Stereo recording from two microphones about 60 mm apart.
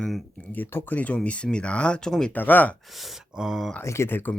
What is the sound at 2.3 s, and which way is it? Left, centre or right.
Speech, left.